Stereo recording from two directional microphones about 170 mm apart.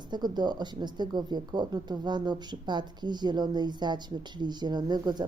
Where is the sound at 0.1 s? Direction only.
25° right (ahead or behind).